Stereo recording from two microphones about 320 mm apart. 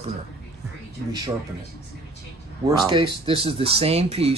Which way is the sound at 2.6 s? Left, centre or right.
Centre.